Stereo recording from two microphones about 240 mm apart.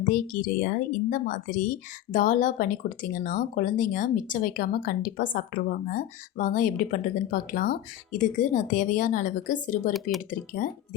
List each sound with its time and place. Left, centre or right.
0.1 s a woman's voice: left